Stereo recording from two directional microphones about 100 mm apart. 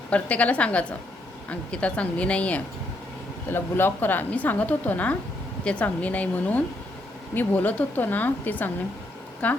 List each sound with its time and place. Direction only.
0.1 s a woman's voice: 15° left (ahead or behind)